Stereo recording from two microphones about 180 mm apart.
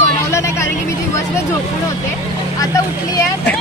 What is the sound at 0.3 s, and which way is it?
Vehicle, 15° left (ahead or behind).